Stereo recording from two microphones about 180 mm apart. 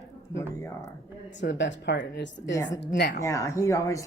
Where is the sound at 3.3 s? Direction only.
15° left (ahead or behind).